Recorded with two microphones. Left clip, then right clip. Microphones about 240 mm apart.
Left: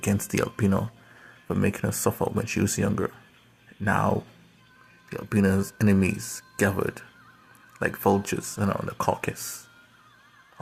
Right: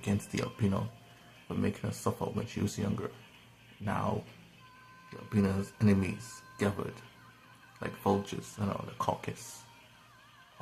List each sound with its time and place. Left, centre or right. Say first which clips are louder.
0.0 s speech: left 9 dB; left
5.1 s speech: left 9 dB; left